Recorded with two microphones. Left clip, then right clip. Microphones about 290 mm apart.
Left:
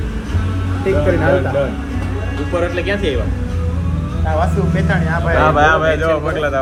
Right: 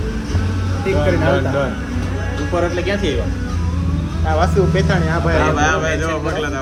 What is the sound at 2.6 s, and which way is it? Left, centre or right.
Speech, centre.